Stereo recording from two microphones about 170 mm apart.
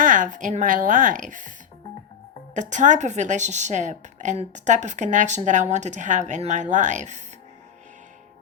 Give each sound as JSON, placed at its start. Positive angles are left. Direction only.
{"t": 0.0, "sound": "a woman's voice", "side_deg": -50}
{"t": 2.6, "sound": "a woman's voice", "side_deg": -45}